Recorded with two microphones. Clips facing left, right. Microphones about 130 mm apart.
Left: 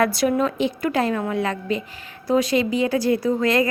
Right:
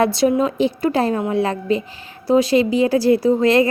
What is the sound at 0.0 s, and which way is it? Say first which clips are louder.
A woman's voice: right 3 dB; 25° right (ahead or behind).